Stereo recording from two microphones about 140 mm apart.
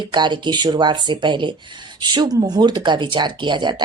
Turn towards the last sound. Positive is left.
turn(degrees=-35)  # may be behind; listen again after turning